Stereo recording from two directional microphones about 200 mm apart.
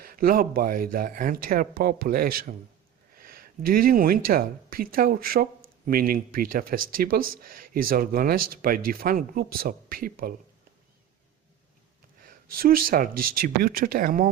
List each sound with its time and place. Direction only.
0.0 s speech: 45° right (ahead or behind)
12.2 s speech: 45° right (ahead or behind)